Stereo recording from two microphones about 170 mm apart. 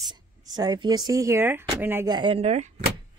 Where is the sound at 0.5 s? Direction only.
25° right (ahead or behind).